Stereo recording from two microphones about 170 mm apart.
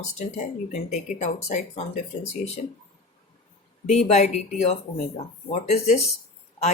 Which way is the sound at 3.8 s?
40° left (ahead or behind).